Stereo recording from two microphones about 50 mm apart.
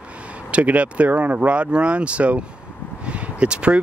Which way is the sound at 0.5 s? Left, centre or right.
Right.